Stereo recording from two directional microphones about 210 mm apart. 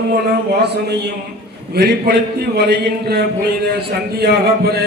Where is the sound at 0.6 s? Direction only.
50° right (ahead or behind).